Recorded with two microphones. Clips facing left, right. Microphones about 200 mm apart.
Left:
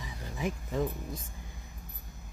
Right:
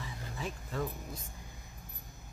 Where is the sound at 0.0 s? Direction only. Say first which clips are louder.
Left 5 dB; 15° left (ahead or behind).